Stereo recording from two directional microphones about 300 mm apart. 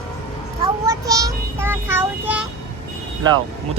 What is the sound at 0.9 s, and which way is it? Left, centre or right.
Child singing, centre.